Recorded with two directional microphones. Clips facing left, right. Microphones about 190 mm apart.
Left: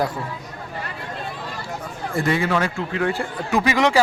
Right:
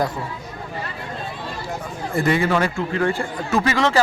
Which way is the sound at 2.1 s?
Centre (ahead or behind).